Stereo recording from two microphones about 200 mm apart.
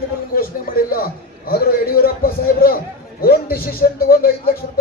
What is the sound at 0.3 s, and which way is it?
A man's voice, 45° left (ahead or behind).